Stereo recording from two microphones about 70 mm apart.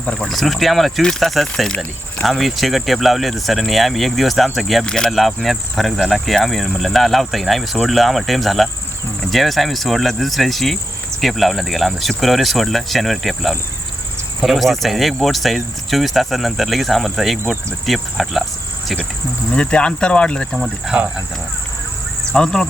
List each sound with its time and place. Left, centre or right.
0.0 s speech: centre
0.3 s insect: centre
4.9 s speech: centre
5.1 s insect: centre
19.5 s speech: centre
20.5 s insect: centre
22.3 s speech: centre